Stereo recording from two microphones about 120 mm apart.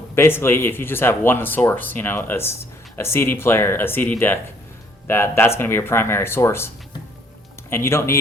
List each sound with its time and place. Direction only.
0.2 s speech: 20° left (ahead or behind)
7.7 s speech: 20° left (ahead or behind)